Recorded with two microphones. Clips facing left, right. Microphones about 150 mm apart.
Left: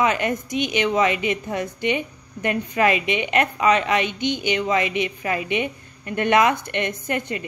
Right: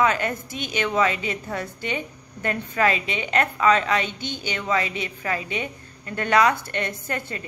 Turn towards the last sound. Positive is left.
turn(degrees=20)  # may be behind; listen again after turning